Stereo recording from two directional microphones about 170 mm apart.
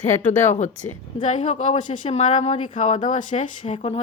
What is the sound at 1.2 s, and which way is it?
Speech, 45° left (ahead or behind).